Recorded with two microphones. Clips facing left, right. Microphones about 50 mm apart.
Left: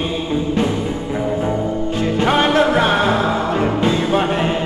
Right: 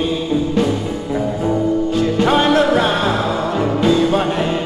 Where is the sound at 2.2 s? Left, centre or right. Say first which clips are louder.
Even; left.